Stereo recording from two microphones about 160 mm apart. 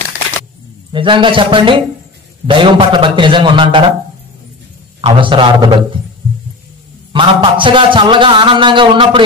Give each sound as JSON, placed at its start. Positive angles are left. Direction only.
{"t": 0.9, "sound": "a man's voice", "side_deg": -30}
{"t": 5.0, "sound": "a man's voice", "side_deg": -30}
{"t": 7.1, "sound": "a man's voice", "side_deg": -30}